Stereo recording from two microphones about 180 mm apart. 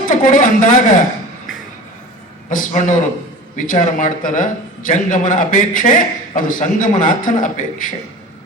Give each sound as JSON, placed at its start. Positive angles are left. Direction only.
{"t": 0.0, "sound": "speech", "side_deg": 45}
{"t": 2.5, "sound": "a man's voice", "side_deg": 45}